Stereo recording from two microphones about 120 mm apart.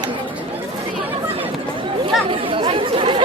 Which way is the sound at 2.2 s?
50° right (ahead or behind).